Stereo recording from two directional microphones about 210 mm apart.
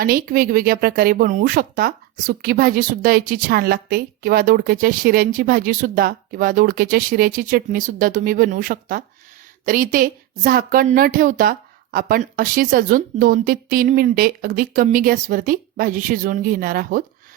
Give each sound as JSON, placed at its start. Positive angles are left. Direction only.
{"t": 0.0, "sound": "speech", "side_deg": -45}